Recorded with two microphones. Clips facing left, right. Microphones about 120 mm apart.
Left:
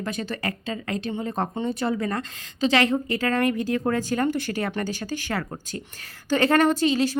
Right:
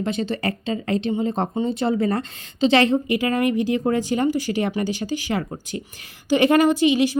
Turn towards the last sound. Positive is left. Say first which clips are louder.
# right 4 dB
turn(degrees=-15)  # may be behind; listen again after turning